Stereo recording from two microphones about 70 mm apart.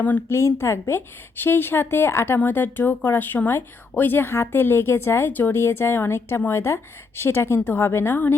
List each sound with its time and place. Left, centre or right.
0.3 s speech: left